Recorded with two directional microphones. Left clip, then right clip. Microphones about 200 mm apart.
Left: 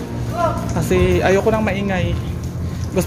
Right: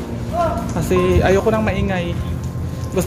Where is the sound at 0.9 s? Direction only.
10° left (ahead or behind).